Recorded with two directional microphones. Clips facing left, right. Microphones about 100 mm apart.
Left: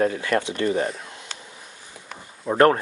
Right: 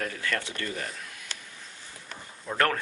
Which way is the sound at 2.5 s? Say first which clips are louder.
Left 10 dB; 30° left (ahead or behind).